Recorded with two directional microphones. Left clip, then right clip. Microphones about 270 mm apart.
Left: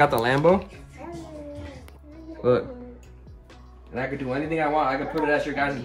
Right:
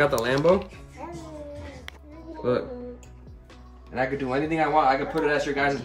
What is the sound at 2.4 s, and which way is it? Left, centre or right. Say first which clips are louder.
Speech: left 4 dB; left.